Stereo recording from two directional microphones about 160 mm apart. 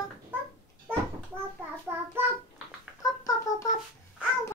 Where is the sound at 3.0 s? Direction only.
20° left (ahead or behind).